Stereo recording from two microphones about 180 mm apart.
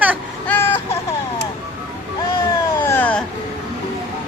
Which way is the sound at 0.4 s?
10° left (ahead or behind).